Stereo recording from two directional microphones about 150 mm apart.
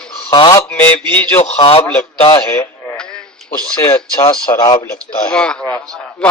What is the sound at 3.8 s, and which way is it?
Speech, 25° left (ahead or behind).